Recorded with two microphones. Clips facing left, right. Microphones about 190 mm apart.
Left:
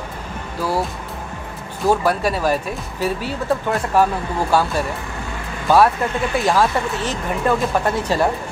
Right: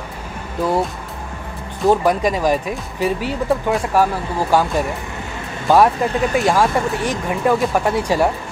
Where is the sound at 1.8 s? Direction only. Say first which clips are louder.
Right 2 dB; 15° right (ahead or behind).